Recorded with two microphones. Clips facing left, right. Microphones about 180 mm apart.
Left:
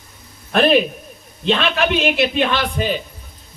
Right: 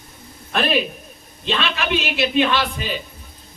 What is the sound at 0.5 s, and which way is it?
A man's voice, 50° left (ahead or behind).